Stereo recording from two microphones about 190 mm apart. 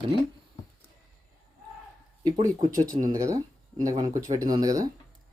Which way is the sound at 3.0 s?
15° right (ahead or behind).